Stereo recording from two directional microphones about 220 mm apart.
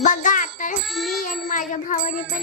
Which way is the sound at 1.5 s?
35° left (ahead or behind).